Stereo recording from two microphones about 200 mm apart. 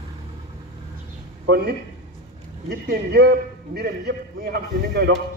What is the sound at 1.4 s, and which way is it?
A man's voice, 55° right (ahead or behind).